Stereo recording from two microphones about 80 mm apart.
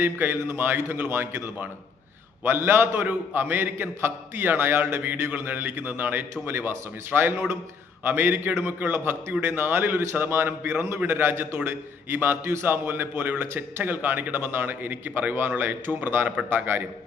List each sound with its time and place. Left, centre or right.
0.0 s a man's voice: right